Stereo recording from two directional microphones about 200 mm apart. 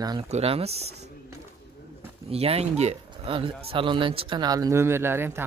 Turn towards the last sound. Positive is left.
turn(degrees=-10)  # may be behind; listen again after turning